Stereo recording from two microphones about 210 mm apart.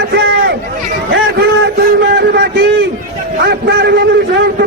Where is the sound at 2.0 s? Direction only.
50° right (ahead or behind).